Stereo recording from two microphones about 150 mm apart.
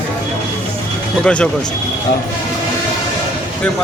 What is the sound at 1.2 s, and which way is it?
Speech, 10° left (ahead or behind).